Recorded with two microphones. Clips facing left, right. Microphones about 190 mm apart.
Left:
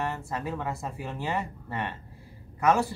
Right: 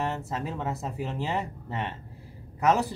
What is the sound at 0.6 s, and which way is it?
Speech, 20° right (ahead or behind).